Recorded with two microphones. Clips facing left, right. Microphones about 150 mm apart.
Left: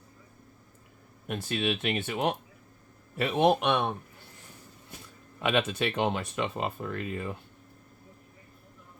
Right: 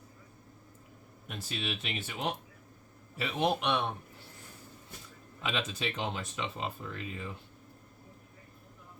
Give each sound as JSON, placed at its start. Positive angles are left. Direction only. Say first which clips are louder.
{"t": 1.3, "sound": "speech", "louder": "left 8 dB", "side_deg": 55}
{"t": 5.4, "sound": "speech", "louder": "left 8 dB", "side_deg": 60}